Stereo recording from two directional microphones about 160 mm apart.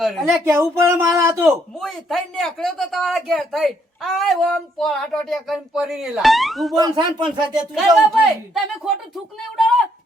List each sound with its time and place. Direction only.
0.0 s a man's voice: centre (ahead or behind)
0.4 s speech: 15° right (ahead or behind)
1.5 s a man's voice: centre (ahead or behind)
6.7 s speech: 25° right (ahead or behind)
7.7 s a man's voice: centre (ahead or behind)